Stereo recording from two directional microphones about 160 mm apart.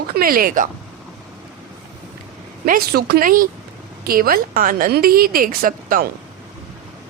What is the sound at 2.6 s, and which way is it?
A woman's voice, 70° right (ahead or behind).